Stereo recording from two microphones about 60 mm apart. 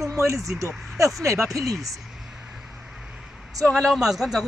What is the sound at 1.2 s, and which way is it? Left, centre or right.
Speech, right.